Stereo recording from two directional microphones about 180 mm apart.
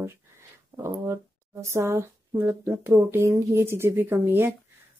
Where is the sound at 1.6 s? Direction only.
15° right (ahead or behind).